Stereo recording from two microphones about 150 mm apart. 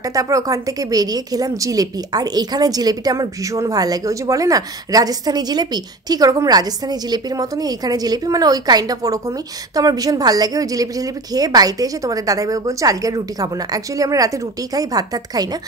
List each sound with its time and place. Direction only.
0.1 s a woman's voice: 20° right (ahead or behind)